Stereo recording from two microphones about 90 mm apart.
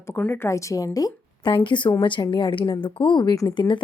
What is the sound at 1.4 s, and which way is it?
Speech, 60° left (ahead or behind).